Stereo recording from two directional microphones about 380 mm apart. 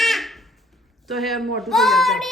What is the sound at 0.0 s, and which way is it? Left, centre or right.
Goat, centre.